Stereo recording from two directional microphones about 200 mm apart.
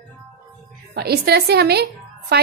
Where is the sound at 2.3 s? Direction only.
55° right (ahead or behind).